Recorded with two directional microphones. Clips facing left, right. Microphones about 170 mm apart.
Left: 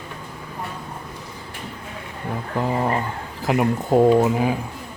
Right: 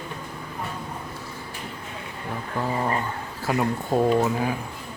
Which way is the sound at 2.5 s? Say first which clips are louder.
Left 4 dB; 20° left (ahead or behind).